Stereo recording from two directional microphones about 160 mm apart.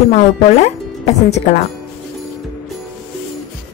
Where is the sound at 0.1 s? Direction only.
45° left (ahead or behind).